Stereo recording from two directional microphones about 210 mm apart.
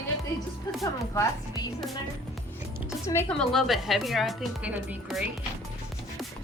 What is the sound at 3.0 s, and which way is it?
Speech, 10° left (ahead or behind).